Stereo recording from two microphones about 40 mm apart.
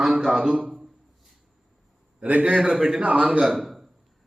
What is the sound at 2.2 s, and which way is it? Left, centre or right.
Speech, right.